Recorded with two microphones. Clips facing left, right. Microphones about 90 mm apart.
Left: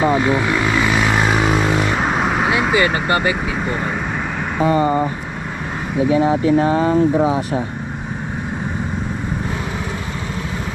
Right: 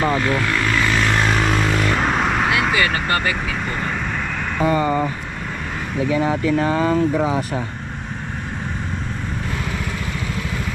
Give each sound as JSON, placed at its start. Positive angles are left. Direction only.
{"t": 0.0, "sound": "vehicle", "side_deg": 15}
{"t": 2.8, "sound": "speech", "side_deg": 15}
{"t": 4.7, "sound": "speech", "side_deg": 30}
{"t": 6.1, "sound": "speech", "side_deg": 20}
{"t": 7.2, "sound": "speech", "side_deg": 15}